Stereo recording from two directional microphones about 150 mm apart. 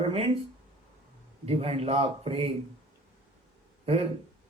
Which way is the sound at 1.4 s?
40° right (ahead or behind).